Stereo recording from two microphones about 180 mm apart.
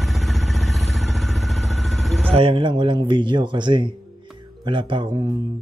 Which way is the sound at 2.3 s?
30° right (ahead or behind).